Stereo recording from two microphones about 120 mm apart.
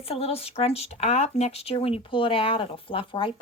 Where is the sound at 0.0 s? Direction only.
55° left (ahead or behind).